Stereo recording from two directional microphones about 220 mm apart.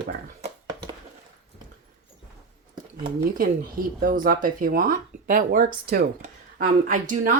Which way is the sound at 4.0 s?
40° right (ahead or behind).